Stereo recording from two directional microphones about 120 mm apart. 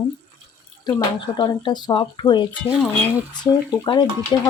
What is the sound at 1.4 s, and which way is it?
Speech, 40° left (ahead or behind).